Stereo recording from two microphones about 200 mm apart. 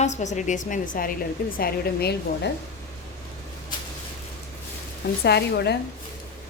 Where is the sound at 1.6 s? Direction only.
50° left (ahead or behind).